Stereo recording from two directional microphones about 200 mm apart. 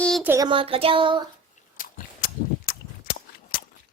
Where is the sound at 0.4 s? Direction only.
25° right (ahead or behind).